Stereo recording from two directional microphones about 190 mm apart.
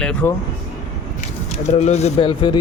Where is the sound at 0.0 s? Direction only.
5° left (ahead or behind).